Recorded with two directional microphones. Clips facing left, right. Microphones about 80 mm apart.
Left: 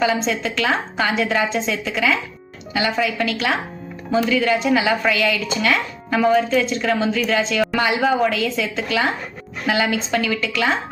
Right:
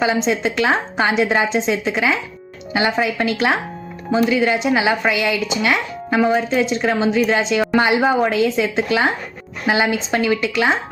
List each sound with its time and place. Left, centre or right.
0.0 s a woman's voice: right